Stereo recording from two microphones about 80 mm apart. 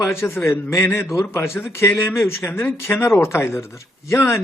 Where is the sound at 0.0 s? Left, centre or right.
Left.